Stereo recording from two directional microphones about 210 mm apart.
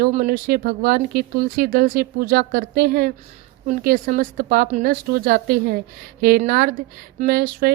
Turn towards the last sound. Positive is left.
turn(degrees=-45)  # may be behind; listen again after turning